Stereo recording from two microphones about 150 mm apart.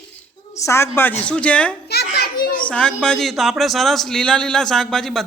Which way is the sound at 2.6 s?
5° left (ahead or behind).